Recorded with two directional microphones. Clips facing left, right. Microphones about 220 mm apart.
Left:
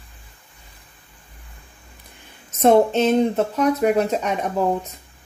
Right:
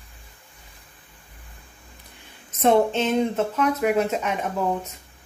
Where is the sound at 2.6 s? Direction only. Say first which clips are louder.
Left 4 dB; 40° left (ahead or behind).